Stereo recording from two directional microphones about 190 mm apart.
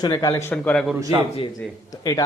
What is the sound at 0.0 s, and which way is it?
Speech, 15° left (ahead or behind).